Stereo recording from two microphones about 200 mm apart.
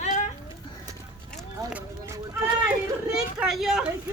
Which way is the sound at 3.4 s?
Centre (ahead or behind).